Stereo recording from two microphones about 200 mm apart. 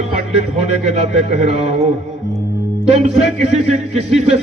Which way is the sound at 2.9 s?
30° right (ahead or behind).